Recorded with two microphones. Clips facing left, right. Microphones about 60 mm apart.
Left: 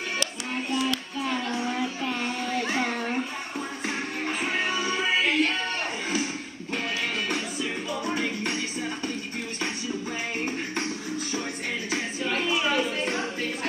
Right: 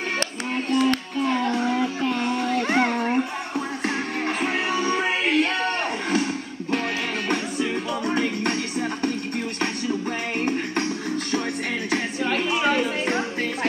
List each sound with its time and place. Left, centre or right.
0.2 s music: right
1.4 s a sound: right
2.2 s children playing: right
4.4 s music: right
7.2 s music: right
11.9 s music: right
12.5 s music: right
13.1 s music: right